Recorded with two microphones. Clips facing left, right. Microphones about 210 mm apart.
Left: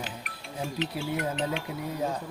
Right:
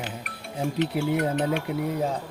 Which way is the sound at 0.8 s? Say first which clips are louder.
Right 7 dB; 55° right (ahead or behind).